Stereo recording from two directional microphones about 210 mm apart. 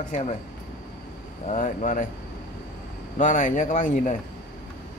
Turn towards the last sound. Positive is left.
turn(degrees=35)  # may be behind; listen again after turning